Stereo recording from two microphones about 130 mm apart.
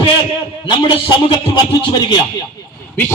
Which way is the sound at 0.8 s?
40° left (ahead or behind).